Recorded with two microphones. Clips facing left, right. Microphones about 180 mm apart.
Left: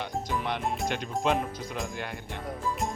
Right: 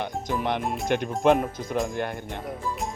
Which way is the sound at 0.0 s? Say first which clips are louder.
Right 4 dB; 50° right (ahead or behind).